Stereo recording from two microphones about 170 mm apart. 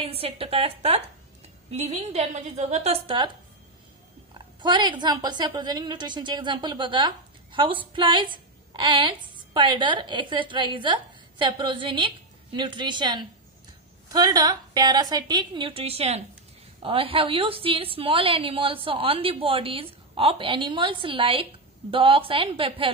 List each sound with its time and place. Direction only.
0.0 s a woman's voice: 35° right (ahead or behind)
4.3 s a woman's voice: 25° right (ahead or behind)